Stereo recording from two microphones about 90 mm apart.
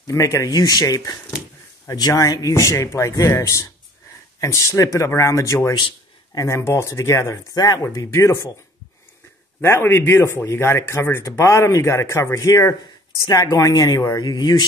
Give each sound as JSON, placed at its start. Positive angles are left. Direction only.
{"t": 0.0, "sound": "speech", "side_deg": 40}
{"t": 7.5, "sound": "speech", "side_deg": 50}
{"t": 7.8, "sound": "speech", "side_deg": 35}
{"t": 9.6, "sound": "speech", "side_deg": 25}